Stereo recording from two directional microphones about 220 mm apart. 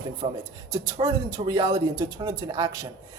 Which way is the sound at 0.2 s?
25° right (ahead or behind).